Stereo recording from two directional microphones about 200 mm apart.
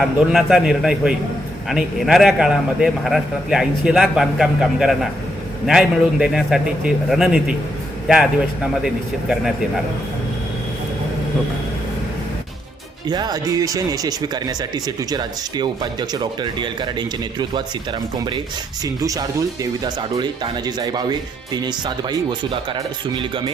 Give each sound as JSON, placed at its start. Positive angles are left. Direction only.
{"t": 0.0, "sound": "a man's voice", "side_deg": 0}
{"t": 13.1, "sound": "speech", "side_deg": -20}
{"t": 19.0, "sound": "speech", "side_deg": -15}